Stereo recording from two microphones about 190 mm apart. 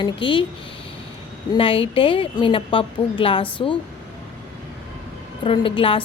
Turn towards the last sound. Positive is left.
turn(degrees=30)  # may be behind; listen again after turning